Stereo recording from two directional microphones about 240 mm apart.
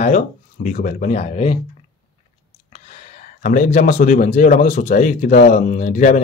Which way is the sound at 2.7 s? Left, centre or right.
Left.